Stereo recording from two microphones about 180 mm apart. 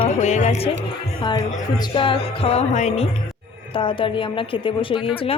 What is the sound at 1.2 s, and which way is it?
A woman's voice, 25° left (ahead or behind).